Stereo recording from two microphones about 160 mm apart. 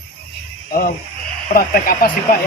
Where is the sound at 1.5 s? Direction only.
65° left (ahead or behind).